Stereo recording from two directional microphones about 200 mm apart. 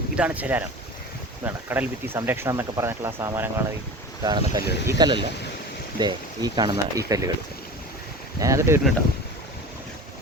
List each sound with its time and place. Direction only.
0.2 s speech: 5° right (ahead or behind)
4.6 s speech: 55° left (ahead or behind)
4.9 s speech: 20° right (ahead or behind)
8.4 s speech: 15° right (ahead or behind)